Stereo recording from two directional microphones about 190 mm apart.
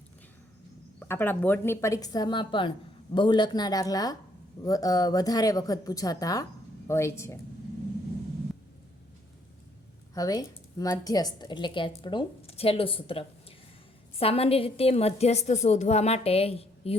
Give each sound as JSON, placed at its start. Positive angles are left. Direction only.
{"t": 0.9, "sound": "a woman's voice", "side_deg": 10}
{"t": 10.2, "sound": "a woman's voice", "side_deg": 20}